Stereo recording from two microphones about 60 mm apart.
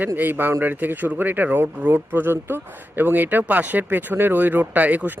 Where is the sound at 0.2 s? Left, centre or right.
Right.